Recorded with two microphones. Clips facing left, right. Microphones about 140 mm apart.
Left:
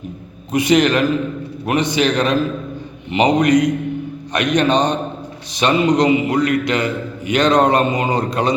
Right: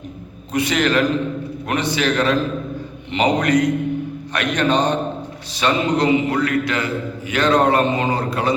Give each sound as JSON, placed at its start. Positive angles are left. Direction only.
{"t": 0.5, "sound": "a man's voice", "side_deg": 15}